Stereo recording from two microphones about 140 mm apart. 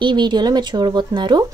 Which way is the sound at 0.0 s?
35° right (ahead or behind).